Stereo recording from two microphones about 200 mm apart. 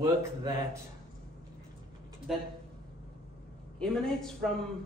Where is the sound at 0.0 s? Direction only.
15° right (ahead or behind).